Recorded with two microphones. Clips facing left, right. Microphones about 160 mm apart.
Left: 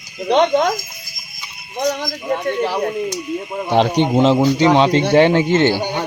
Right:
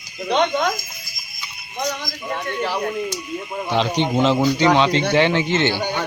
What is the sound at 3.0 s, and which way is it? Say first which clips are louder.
Speech: left 4 dB; 20° left (ahead or behind).